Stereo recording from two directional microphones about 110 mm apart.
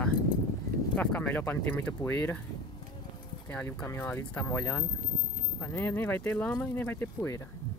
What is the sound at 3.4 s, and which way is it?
Speech, 20° left (ahead or behind).